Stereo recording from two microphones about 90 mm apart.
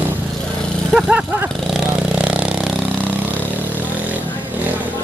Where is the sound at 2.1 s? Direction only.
10° right (ahead or behind).